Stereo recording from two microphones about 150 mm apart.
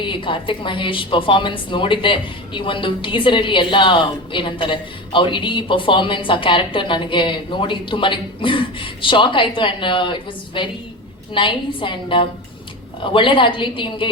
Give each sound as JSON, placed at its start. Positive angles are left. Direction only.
{"t": 0.0, "sound": "a woman's voice", "side_deg": 35}